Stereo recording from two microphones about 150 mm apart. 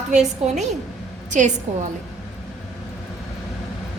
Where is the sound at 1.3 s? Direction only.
55° right (ahead or behind).